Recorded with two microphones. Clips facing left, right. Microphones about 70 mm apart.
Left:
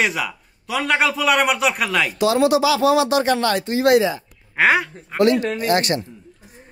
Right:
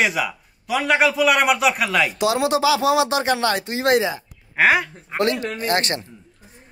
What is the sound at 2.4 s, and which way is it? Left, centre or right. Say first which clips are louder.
Speech: left 1 dB; right.